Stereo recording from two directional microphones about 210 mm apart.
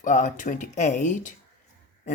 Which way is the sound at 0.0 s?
35° left (ahead or behind).